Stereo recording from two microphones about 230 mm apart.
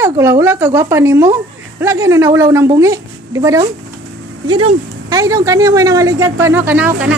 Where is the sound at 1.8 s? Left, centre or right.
Centre.